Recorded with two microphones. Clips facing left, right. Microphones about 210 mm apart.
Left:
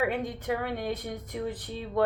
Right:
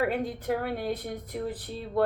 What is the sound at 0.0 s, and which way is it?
Speech, 35° right (ahead or behind).